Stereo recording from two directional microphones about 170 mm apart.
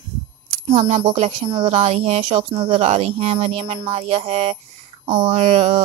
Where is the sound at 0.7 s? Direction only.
35° right (ahead or behind).